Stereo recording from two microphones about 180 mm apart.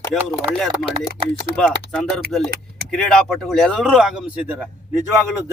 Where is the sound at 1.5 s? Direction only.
5° left (ahead or behind).